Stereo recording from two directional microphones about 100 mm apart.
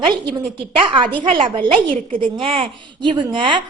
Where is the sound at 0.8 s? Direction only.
55° right (ahead or behind).